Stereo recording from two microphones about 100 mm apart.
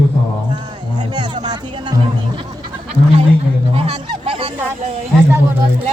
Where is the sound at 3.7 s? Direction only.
75° right (ahead or behind).